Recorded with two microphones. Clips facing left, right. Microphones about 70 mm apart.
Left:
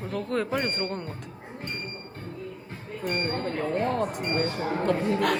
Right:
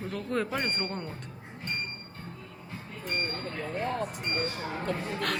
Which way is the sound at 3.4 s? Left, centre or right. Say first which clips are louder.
Left 6 dB; left.